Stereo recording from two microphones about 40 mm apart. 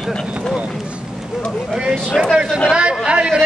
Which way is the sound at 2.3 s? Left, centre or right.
Centre.